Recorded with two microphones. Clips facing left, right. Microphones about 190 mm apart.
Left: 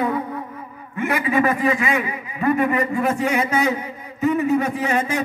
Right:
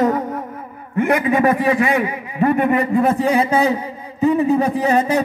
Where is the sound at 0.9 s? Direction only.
55° right (ahead or behind).